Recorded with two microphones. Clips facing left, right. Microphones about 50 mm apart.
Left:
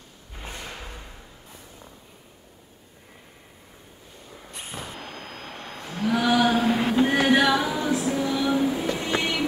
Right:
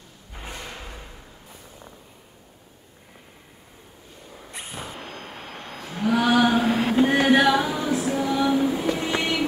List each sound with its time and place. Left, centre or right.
0.7 s music: centre
4.9 s vehicle: centre
5.8 s music: centre